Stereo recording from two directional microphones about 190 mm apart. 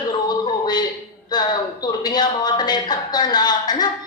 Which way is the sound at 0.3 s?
20° left (ahead or behind).